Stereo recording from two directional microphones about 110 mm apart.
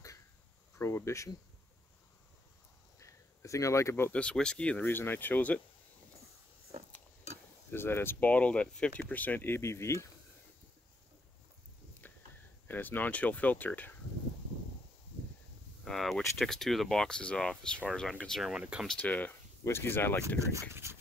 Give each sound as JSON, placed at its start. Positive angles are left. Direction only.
{"t": 0.7, "sound": "speech", "side_deg": 25}
{"t": 3.0, "sound": "a sound", "side_deg": 30}
{"t": 4.1, "sound": "speech", "side_deg": 10}
{"t": 7.7, "sound": "speech", "side_deg": 20}
{"t": 12.0, "sound": "walk", "side_deg": 15}
{"t": 12.6, "sound": "speech", "side_deg": 15}
{"t": 15.8, "sound": "speech", "side_deg": 5}
{"t": 18.9, "sound": "speech", "side_deg": 15}
{"t": 20.7, "sound": "speech", "side_deg": -20}